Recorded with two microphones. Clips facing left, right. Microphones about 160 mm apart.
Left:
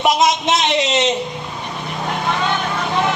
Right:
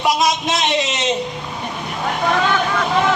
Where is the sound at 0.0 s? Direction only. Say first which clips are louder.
Left 2 dB; 20° left (ahead or behind).